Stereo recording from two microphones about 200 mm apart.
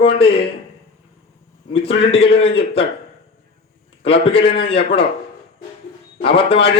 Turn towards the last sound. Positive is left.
turn(degrees=30)  # may be behind; listen again after turning